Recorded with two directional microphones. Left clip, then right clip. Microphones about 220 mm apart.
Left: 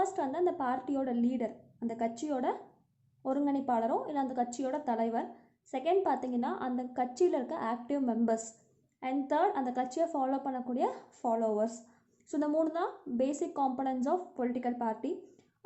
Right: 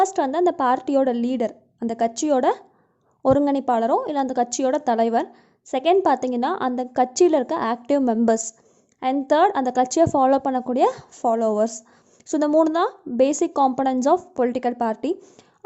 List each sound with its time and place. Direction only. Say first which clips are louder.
0.0 s a woman's voice: right 12 dB; 40° right (ahead or behind)